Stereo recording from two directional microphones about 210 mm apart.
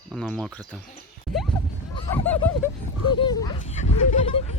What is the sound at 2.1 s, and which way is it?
Speech, 10° left (ahead or behind).